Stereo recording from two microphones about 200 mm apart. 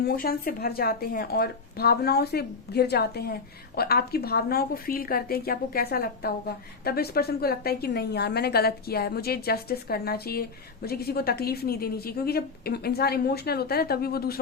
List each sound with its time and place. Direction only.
0.0 s a woman's voice: 50° left (ahead or behind)